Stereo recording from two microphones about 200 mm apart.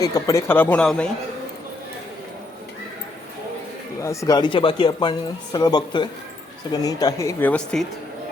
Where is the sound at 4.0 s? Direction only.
15° left (ahead or behind).